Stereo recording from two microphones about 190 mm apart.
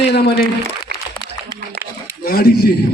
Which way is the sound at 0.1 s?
60° left (ahead or behind).